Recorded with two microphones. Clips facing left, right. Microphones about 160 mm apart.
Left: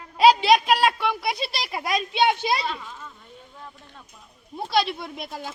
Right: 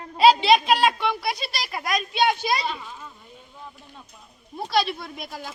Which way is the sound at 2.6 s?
5° right (ahead or behind).